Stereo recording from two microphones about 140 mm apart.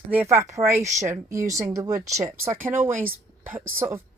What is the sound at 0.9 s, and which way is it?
Speech, 60° right (ahead or behind).